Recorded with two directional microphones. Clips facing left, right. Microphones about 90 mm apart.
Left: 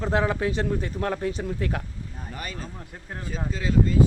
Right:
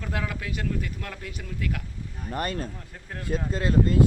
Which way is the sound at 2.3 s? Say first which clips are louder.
Right 7 dB; 50° right (ahead or behind).